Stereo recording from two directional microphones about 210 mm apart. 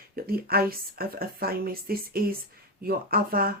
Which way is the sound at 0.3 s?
45° right (ahead or behind).